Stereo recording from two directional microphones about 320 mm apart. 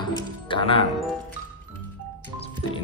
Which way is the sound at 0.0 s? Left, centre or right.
Centre.